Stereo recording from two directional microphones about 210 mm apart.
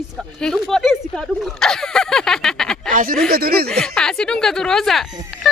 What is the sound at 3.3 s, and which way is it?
Speech, 45° right (ahead or behind).